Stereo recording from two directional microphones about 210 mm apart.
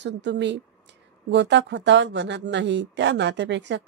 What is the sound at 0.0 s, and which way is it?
Speech, 55° right (ahead or behind).